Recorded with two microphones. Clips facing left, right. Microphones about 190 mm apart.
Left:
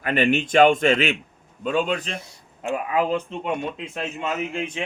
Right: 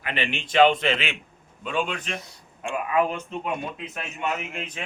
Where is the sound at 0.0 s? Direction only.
45° left (ahead or behind).